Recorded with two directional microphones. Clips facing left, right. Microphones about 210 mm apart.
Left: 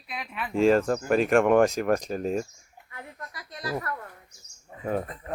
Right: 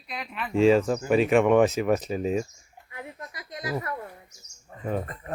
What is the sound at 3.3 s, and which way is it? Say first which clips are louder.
Speech: even; 20° right (ahead or behind).